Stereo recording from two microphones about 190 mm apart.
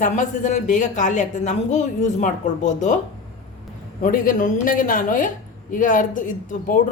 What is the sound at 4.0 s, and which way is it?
A woman's voice, 45° left (ahead or behind).